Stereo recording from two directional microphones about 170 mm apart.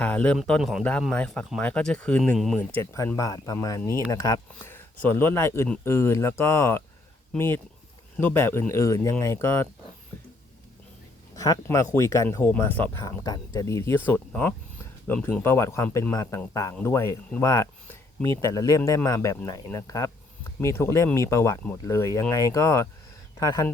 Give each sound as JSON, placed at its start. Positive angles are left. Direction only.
{"t": 0.0, "sound": "speech", "side_deg": 10}
{"t": 2.7, "sound": "speech", "side_deg": 15}
{"t": 11.3, "sound": "speech", "side_deg": 20}